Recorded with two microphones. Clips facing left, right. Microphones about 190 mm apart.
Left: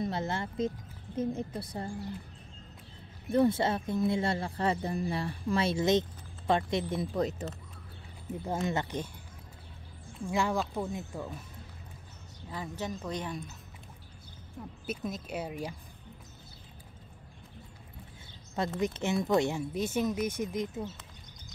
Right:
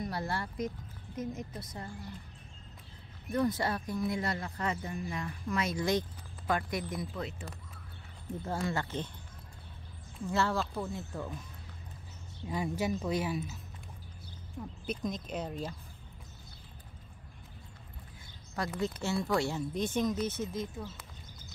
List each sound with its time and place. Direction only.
0.0 s a woman's voice: 20° left (ahead or behind)
3.3 s speech: 25° left (ahead or behind)
7.2 s speech: 40° left (ahead or behind)
8.5 s speech: 20° left (ahead or behind)
10.2 s speech: 15° left (ahead or behind)
12.4 s a woman's voice: 10° right (ahead or behind)
14.9 s speech: 5° left (ahead or behind)
18.8 s speech: 20° left (ahead or behind)
19.7 s speech: 10° left (ahead or behind)